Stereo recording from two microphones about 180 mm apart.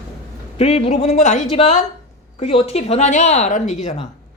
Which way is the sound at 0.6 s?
35° left (ahead or behind).